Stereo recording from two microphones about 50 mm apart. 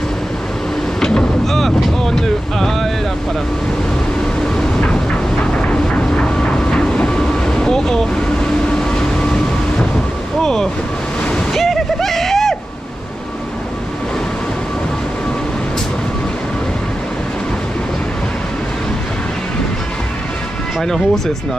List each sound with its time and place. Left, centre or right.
1.0 s vehicle: centre
4.6 s vehicle: centre
8.6 s train: centre
10.4 s speech: centre
11.5 s splash: centre
20.8 s speech: centre